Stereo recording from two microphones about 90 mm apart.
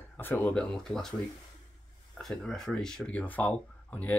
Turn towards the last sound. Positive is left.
turn(degrees=15)  # may be behind; listen again after turning